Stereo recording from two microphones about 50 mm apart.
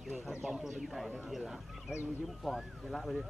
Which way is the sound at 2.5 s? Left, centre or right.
Centre.